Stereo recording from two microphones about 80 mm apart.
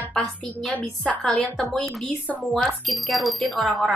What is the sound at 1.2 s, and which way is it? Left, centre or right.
Speech, centre.